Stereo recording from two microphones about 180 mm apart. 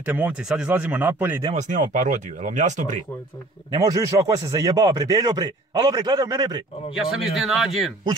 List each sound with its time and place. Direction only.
0.0 s speech: 10° right (ahead or behind)
1.4 s speech: 40° right (ahead or behind)
3.7 s speech: 20° right (ahead or behind)
7.0 s speech: centre (ahead or behind)